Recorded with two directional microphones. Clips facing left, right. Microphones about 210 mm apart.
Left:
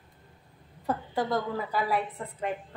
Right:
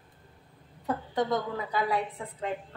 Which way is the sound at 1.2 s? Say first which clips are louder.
Right 1 dB; 5° left (ahead or behind).